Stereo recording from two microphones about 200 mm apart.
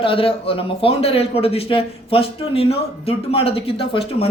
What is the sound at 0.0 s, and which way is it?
A man's voice, 25° left (ahead or behind).